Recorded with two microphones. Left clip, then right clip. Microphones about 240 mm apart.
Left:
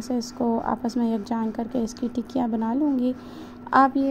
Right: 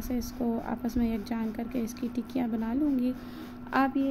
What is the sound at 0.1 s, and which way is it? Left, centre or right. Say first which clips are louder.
A woman's voice: left 7 dB; centre.